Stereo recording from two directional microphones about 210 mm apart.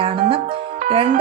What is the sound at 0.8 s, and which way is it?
Music, 25° right (ahead or behind).